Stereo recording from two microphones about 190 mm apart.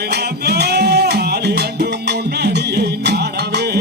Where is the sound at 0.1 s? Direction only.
60° right (ahead or behind).